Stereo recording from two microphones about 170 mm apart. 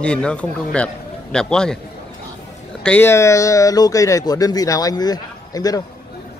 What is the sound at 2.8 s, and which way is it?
Speech, 10° left (ahead or behind).